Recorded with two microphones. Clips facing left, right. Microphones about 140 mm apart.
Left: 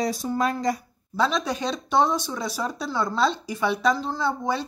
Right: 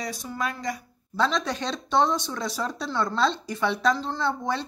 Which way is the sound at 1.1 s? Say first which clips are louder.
Left 1 dB; 10° left (ahead or behind).